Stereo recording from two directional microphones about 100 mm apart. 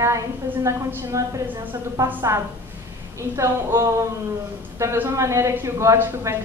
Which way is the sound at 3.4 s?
30° right (ahead or behind).